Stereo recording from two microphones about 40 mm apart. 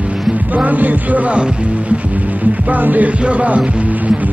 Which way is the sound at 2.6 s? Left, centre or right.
Right.